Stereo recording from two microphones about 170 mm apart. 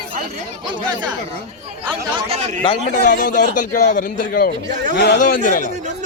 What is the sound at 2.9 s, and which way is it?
A man's voice, 55° left (ahead or behind).